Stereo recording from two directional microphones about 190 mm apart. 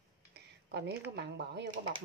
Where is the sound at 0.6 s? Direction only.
60° right (ahead or behind).